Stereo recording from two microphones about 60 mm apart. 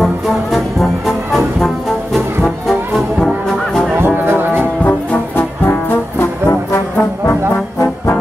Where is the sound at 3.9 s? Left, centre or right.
Right.